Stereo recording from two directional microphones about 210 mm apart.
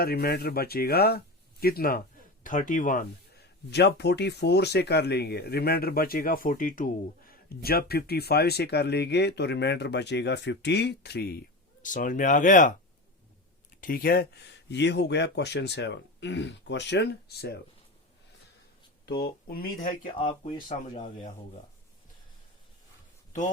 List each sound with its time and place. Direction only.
0.0 s speech: 45° left (ahead or behind)
11.8 s speech: 40° left (ahead or behind)
13.8 s speech: 45° left (ahead or behind)
19.0 s speech: 50° left (ahead or behind)
20.1 s speech: 25° left (ahead or behind)